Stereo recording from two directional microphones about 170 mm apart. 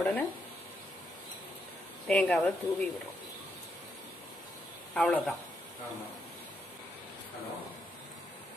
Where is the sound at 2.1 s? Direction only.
5° left (ahead or behind).